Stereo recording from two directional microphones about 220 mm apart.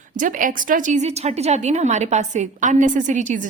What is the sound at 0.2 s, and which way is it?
A woman's voice, 35° right (ahead or behind).